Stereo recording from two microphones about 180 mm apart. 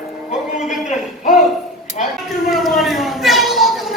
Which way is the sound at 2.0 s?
40° left (ahead or behind).